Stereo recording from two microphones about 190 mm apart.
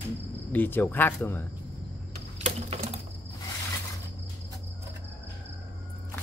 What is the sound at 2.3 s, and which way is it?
Typing, 35° right (ahead or behind).